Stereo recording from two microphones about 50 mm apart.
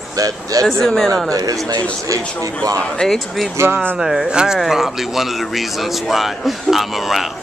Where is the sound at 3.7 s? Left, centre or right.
Right.